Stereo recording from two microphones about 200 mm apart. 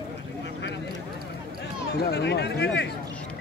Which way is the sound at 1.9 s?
55° left (ahead or behind).